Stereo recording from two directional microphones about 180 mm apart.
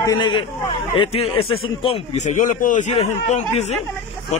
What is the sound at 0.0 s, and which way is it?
Speech, 25° left (ahead or behind).